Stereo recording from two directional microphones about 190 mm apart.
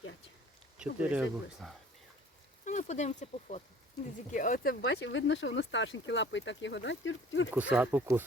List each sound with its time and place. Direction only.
0.8 s speech: 5° right (ahead or behind)
2.6 s speech: 40° left (ahead or behind); by 7.5 s 90° left
7.5 s speech: 10° right (ahead or behind)